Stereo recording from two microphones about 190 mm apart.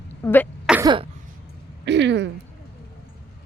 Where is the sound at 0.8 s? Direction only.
25° right (ahead or behind).